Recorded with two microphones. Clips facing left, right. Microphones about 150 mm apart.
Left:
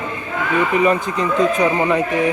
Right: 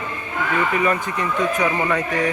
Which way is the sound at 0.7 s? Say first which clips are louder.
Left 4 dB; 20° left (ahead or behind).